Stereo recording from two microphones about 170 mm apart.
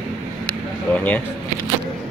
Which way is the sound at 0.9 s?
10° left (ahead or behind).